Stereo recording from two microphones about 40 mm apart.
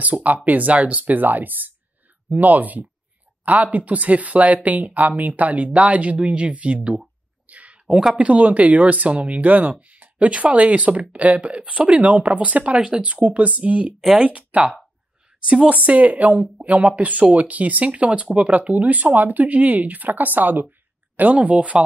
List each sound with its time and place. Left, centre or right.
0.1 s speech: right
0.5 s speech: right
7.4 s a sound: right
8.1 s speech: right
10.1 s speech: right
15.6 s speech: right